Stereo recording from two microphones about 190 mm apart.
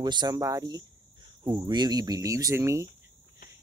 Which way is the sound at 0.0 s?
20° right (ahead or behind).